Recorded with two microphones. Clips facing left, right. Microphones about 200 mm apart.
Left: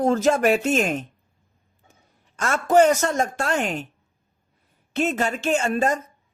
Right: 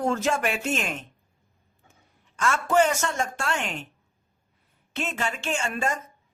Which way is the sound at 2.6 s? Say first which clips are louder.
Left 7 dB; 40° left (ahead or behind).